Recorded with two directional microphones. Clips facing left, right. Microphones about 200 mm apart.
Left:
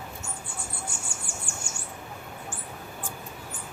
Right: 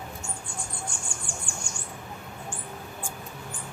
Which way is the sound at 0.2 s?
5° left (ahead or behind).